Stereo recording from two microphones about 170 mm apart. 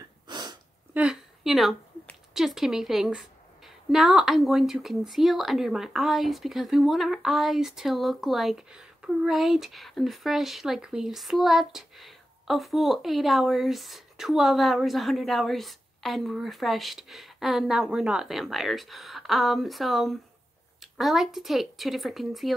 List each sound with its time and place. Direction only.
0.3 s sneeze: 25° right (ahead or behind)
0.9 s a woman's voice: 5° right (ahead or behind)